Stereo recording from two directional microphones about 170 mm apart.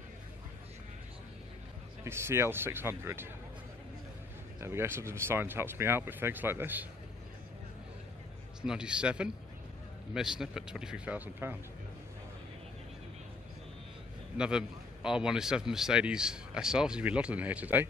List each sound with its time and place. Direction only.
2.0 s speech: 15° right (ahead or behind)
4.6 s speech: 15° right (ahead or behind)
8.6 s a man's voice: 5° right (ahead or behind)
14.3 s a man's voice: 5° right (ahead or behind)